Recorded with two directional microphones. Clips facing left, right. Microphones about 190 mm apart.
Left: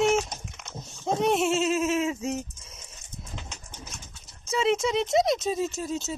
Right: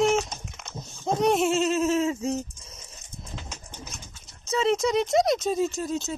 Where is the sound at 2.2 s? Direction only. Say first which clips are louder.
Right 2 dB; 30° right (ahead or behind).